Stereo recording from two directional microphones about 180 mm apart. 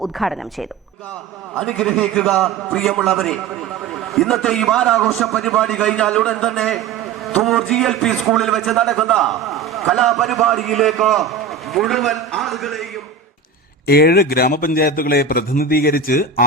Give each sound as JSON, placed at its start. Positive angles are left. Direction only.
{"t": 0.0, "sound": "a man's voice", "side_deg": 0}
{"t": 1.5, "sound": "a man's voice", "side_deg": 5}
{"t": 13.8, "sound": "a man's voice", "side_deg": 60}